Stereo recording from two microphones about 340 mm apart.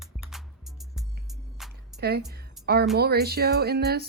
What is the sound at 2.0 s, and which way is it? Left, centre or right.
A woman's voice, right.